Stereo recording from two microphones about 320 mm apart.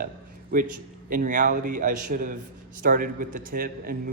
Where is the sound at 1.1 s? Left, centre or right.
Right.